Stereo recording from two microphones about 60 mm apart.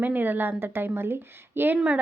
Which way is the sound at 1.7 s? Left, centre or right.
Right.